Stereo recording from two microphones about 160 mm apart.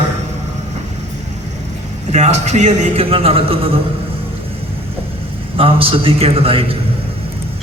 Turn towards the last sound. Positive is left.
turn(degrees=-35)  # may be behind; listen again after turning